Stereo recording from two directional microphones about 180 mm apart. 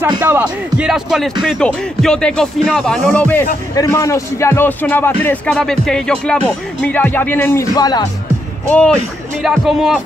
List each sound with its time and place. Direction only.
0.1 s speech: 20° right (ahead or behind)
0.4 s speech: 5° right (ahead or behind); by 8.1 s 20° left (ahead or behind)
8.6 s speech: 5° left (ahead or behind)